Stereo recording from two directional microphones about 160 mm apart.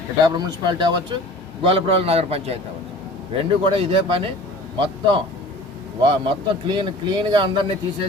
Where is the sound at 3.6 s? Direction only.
35° right (ahead or behind).